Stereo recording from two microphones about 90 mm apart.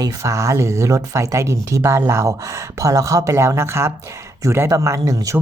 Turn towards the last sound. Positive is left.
turn(degrees=-40)  # may be behind; listen again after turning